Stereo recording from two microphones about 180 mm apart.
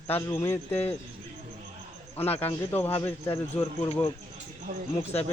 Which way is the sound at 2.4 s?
10° left (ahead or behind).